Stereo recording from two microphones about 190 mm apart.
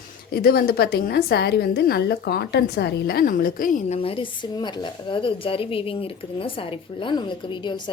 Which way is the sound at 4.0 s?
30° left (ahead or behind).